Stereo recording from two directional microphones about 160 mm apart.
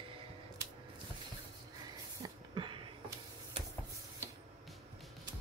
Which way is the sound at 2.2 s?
30° right (ahead or behind).